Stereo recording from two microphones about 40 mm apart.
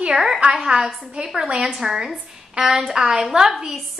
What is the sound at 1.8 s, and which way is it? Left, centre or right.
A woman's voice, centre.